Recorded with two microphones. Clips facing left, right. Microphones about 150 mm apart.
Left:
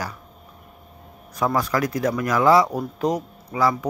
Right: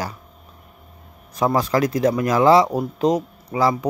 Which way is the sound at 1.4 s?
25° right (ahead or behind).